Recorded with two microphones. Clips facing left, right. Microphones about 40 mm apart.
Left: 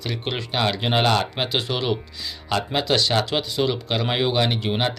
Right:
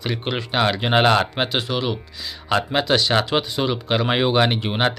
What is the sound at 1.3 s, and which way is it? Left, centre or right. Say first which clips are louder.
Speech: right 2 dB; centre.